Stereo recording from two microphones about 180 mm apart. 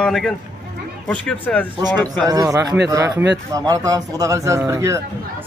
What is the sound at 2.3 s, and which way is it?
Speech, 20° right (ahead or behind).